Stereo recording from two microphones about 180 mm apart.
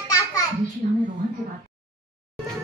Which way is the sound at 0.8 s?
45° right (ahead or behind).